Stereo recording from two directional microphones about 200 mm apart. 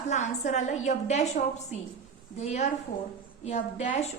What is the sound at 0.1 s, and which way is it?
A woman's voice, 35° left (ahead or behind).